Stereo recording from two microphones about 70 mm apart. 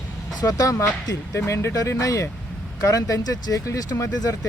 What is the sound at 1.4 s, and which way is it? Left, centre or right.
Speech, left.